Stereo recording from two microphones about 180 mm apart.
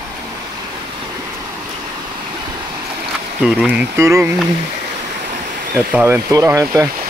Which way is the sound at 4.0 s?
15° right (ahead or behind).